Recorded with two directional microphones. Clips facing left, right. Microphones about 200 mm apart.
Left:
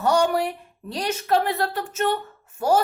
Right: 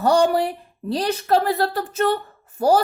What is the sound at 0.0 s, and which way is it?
A woman's voice, 35° right (ahead or behind).